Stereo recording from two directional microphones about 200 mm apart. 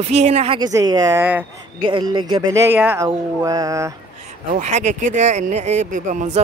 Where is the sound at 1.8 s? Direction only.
25° right (ahead or behind).